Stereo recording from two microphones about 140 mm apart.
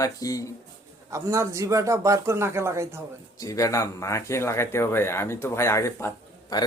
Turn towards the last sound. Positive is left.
turn(degrees=20)  # may be behind; listen again after turning